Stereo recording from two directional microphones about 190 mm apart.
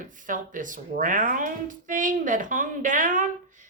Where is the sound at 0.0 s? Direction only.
45° right (ahead or behind).